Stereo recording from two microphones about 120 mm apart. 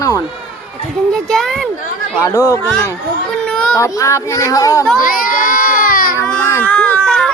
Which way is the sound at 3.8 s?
25° left (ahead or behind).